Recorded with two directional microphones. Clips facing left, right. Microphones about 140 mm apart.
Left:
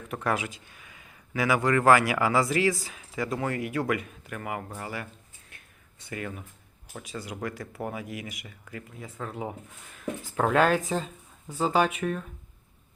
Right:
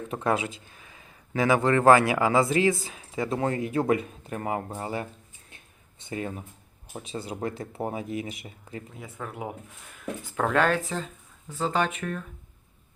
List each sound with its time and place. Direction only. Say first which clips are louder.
0.1 s speech: right 2 dB; 25° right (ahead or behind)
5.5 s a sound: right 1 dB; 25° right (ahead or behind)
6.9 s speech: right 3 dB; 25° right (ahead or behind)
9.0 s speech: left 2 dB; centre (ahead or behind)
10.3 s speech: left 1 dB; 5° left (ahead or behind)